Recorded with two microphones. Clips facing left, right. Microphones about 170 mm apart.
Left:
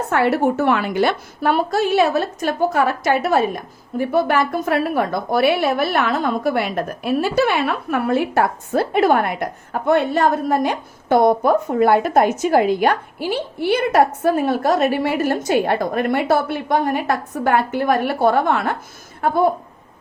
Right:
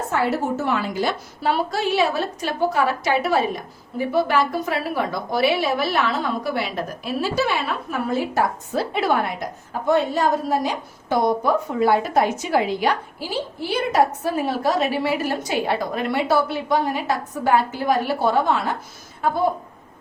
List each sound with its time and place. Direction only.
0.1 s a woman's voice: 65° left (ahead or behind)